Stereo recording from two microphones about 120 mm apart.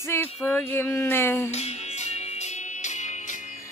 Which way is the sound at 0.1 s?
15° left (ahead or behind).